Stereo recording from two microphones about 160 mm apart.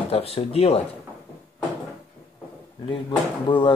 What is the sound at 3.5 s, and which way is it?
Speech, 30° left (ahead or behind).